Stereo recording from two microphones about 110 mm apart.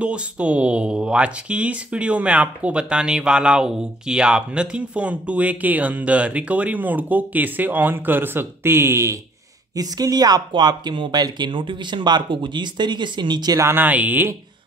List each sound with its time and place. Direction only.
0.0 s speech: 10° right (ahead or behind); by 13.6 s 40° right (ahead or behind)
13.6 s speech: 20° right (ahead or behind)